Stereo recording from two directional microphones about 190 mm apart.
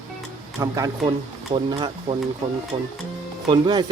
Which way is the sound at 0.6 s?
15° right (ahead or behind).